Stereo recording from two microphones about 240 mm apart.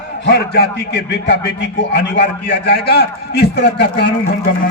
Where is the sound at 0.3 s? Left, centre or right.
Left.